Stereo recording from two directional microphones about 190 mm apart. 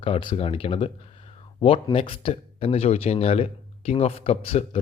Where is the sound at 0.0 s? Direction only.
25° left (ahead or behind).